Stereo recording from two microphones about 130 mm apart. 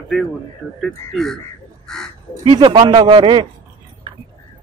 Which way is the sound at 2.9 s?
45° right (ahead or behind).